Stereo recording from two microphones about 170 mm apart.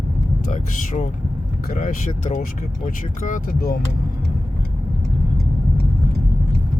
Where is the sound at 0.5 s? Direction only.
45° left (ahead or behind).